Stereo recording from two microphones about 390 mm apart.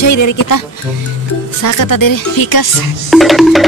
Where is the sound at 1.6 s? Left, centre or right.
Left.